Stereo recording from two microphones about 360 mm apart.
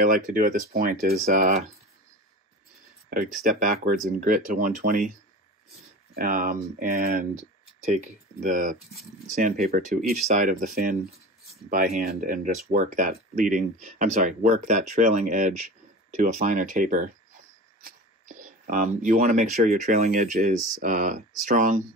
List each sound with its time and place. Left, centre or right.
0.0 s speech: right
3.4 s speech: right
6.1 s speech: right
18.3 s speech: right